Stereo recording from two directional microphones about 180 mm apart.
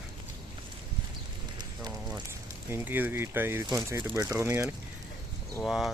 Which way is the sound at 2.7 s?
10° right (ahead or behind).